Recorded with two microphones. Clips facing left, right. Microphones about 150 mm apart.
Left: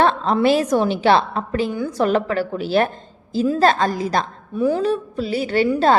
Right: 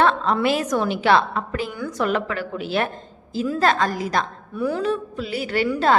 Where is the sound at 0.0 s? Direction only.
35° left (ahead or behind).